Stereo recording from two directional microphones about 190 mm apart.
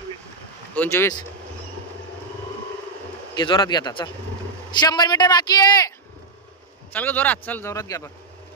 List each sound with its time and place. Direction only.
0.7 s a man's voice: 15° left (ahead or behind)
3.3 s a man's voice: 25° left (ahead or behind)
6.9 s a man's voice: 10° left (ahead or behind)